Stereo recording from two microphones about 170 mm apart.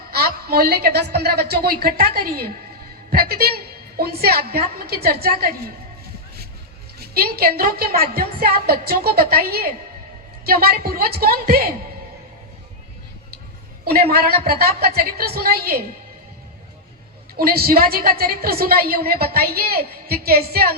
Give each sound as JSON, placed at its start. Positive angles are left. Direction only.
{"t": 0.1, "sound": "a woman's voice", "side_deg": -65}
{"t": 7.0, "sound": "a woman's voice", "side_deg": -65}
{"t": 13.8, "sound": "a woman's voice", "side_deg": -65}
{"t": 17.3, "sound": "a woman's voice", "side_deg": -65}